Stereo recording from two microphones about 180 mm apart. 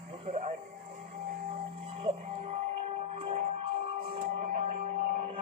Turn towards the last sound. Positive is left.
turn(degrees=-35)  # may be behind; listen again after turning